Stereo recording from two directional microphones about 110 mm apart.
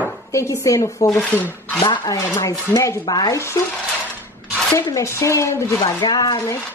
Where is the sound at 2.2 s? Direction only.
25° left (ahead or behind).